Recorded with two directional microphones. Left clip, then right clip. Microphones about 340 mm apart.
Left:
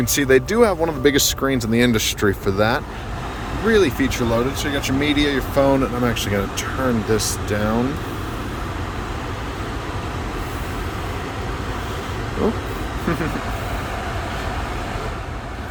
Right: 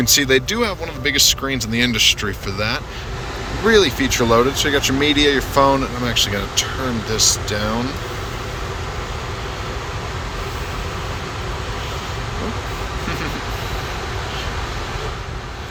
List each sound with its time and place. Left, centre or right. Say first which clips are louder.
0.0 s speech: right 1 dB; centre